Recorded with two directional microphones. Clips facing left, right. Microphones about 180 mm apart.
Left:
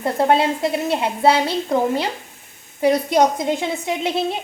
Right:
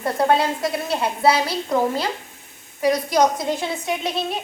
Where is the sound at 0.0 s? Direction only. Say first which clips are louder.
Left 2 dB; 25° left (ahead or behind).